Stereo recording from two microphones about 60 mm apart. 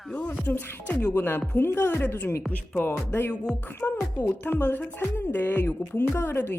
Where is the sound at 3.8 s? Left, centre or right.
Left.